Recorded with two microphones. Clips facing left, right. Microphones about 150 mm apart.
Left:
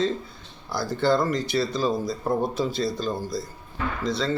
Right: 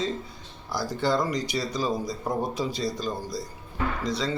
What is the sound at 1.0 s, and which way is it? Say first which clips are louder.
A man's voice: left 4 dB; 10° right (ahead or behind).